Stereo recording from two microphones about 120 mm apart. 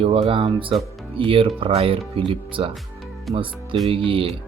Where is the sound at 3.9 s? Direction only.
50° right (ahead or behind).